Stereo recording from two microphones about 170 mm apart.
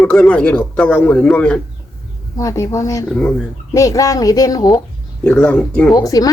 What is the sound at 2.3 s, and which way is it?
Speech, 20° left (ahead or behind).